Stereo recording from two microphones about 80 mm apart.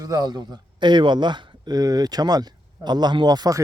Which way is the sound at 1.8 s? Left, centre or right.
Right.